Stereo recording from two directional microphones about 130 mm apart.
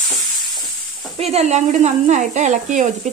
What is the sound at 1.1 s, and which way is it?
A woman's voice, 55° right (ahead or behind).